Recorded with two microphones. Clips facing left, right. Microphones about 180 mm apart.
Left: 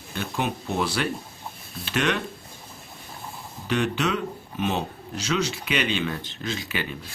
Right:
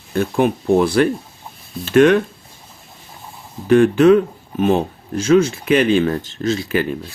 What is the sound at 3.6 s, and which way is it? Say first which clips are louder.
Speech: right 14 dB; 50° right (ahead or behind).